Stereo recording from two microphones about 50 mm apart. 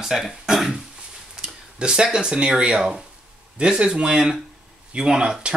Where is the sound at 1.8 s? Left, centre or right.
Centre.